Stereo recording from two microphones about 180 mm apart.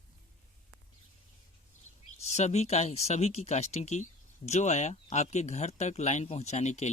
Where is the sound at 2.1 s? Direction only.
40° left (ahead or behind).